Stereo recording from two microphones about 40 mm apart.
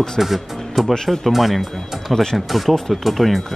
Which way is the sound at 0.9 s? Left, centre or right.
Centre.